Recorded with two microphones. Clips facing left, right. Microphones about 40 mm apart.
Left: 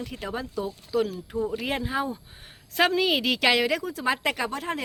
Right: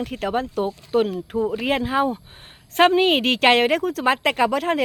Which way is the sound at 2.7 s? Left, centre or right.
Right.